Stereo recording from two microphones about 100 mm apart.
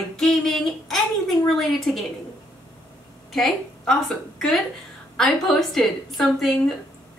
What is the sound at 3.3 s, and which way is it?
A woman's voice, 5° left (ahead or behind).